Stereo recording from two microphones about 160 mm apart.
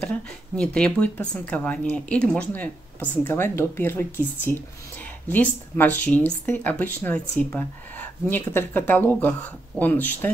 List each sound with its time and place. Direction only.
0.6 s speech: 5° left (ahead or behind)